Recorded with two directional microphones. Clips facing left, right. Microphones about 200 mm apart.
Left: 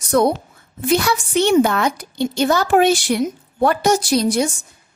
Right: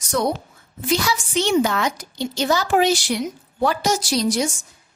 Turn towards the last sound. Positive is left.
turn(degrees=55)  # may be behind; listen again after turning